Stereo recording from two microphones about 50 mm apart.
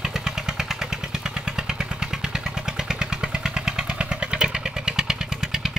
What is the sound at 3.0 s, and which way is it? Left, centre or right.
Vehicle, centre.